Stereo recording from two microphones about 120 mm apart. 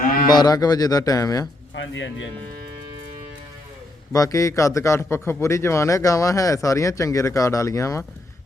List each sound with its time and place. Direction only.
0.3 s speech: 35° left (ahead or behind)
4.1 s speech: 30° left (ahead or behind)